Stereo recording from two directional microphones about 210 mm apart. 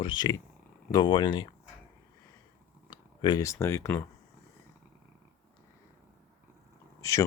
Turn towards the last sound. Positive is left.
turn(degrees=15)  # may be behind; listen again after turning